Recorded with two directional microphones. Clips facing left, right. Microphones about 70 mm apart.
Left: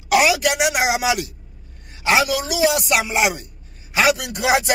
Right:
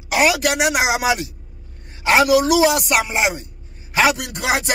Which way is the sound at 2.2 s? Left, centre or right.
Right.